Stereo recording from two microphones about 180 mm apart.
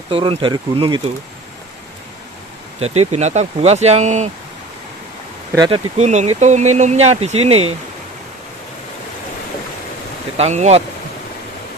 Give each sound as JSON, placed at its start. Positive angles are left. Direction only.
{"t": 0.1, "sound": "speech", "side_deg": -30}
{"t": 2.8, "sound": "speech", "side_deg": -35}
{"t": 5.5, "sound": "speech", "side_deg": -25}
{"t": 5.9, "sound": "speech", "side_deg": -40}
{"t": 10.3, "sound": "speech", "side_deg": -40}